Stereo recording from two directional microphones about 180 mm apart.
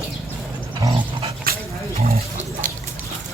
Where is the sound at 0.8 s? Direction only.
25° right (ahead or behind).